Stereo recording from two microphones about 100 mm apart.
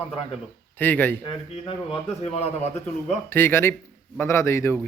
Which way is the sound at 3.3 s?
25° left (ahead or behind).